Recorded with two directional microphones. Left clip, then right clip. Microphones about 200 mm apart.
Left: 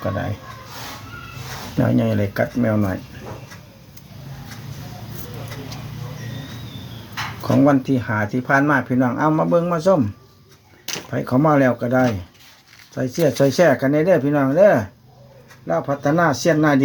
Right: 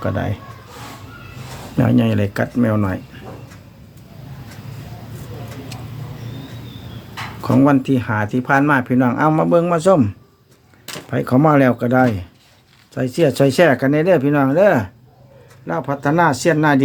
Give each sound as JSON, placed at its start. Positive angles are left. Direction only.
{"t": 1.8, "sound": "speech", "side_deg": -25}
{"t": 7.4, "sound": "speech", "side_deg": -25}